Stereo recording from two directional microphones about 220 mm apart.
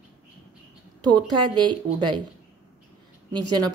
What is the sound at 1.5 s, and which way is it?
Speech, 20° right (ahead or behind).